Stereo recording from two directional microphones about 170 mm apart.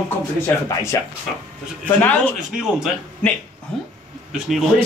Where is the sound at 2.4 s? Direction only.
5° right (ahead or behind).